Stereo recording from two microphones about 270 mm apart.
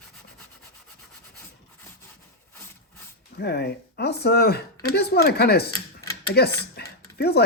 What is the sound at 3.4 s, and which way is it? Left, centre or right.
Speech, left.